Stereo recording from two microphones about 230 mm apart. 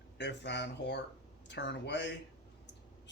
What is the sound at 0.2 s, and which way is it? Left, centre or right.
Speech, left.